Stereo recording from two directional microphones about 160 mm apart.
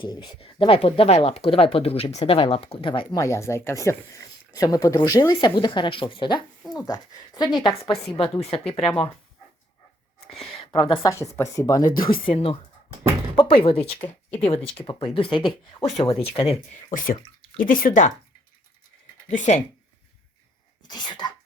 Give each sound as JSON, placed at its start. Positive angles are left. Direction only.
{"t": 0.0, "sound": "speech", "side_deg": 30}
{"t": 3.2, "sound": "speech", "side_deg": 20}
{"t": 10.3, "sound": "speech", "side_deg": 35}
{"t": 17.7, "sound": "speech", "side_deg": 60}
{"t": 19.3, "sound": "speech", "side_deg": 50}
{"t": 20.8, "sound": "speech", "side_deg": 25}